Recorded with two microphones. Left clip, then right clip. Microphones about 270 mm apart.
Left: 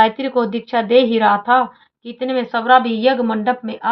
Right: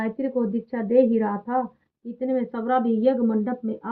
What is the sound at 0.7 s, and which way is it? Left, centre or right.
Speech, centre.